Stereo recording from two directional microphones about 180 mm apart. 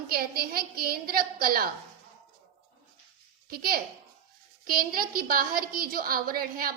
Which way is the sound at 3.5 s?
55° right (ahead or behind).